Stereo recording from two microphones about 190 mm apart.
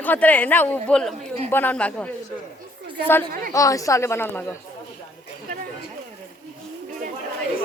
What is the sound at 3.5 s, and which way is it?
A woman's voice, 15° left (ahead or behind).